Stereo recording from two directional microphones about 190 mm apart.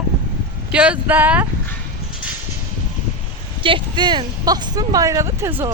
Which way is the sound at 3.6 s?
25° right (ahead or behind).